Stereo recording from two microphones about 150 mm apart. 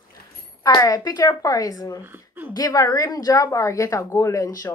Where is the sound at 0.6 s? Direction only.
25° left (ahead or behind).